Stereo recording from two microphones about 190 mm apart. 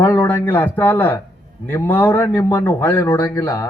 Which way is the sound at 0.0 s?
10° left (ahead or behind).